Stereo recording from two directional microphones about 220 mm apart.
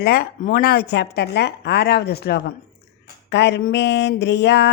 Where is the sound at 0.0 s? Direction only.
45° left (ahead or behind).